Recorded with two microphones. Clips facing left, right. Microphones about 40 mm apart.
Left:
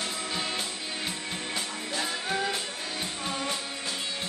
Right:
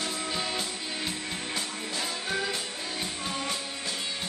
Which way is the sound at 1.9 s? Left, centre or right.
Centre.